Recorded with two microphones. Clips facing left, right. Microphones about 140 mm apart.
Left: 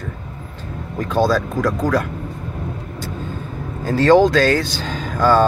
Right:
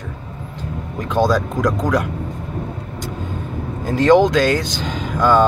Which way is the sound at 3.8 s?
15° right (ahead or behind).